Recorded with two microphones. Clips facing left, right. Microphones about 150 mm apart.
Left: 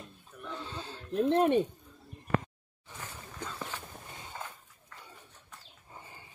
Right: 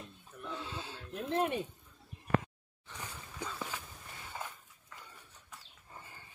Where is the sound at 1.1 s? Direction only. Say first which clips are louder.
Left 8 dB; 35° left (ahead or behind).